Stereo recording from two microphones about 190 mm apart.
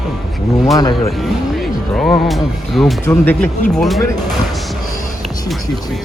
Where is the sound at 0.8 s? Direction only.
20° left (ahead or behind).